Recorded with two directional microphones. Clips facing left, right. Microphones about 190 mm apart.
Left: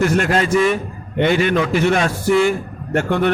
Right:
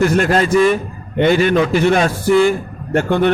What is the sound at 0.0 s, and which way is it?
A man's voice, 35° right (ahead or behind).